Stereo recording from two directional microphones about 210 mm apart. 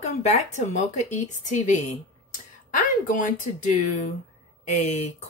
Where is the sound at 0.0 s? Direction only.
35° left (ahead or behind).